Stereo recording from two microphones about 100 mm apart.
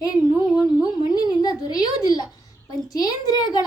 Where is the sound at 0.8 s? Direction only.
40° left (ahead or behind).